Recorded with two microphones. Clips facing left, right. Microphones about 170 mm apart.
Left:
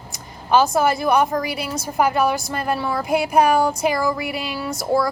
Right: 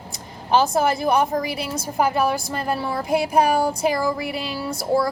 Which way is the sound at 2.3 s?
30° right (ahead or behind).